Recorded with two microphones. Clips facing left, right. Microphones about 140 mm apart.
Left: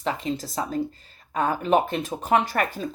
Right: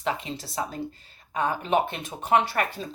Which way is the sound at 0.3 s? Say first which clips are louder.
Left 4 dB; 40° left (ahead or behind).